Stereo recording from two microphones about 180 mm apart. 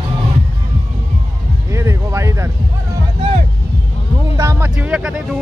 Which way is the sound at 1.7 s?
15° right (ahead or behind).